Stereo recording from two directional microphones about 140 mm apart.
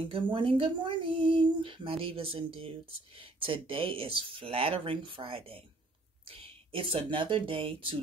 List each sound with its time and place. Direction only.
0.1 s speech: 40° right (ahead or behind)